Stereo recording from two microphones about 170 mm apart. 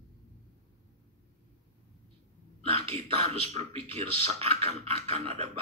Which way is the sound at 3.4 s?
35° right (ahead or behind).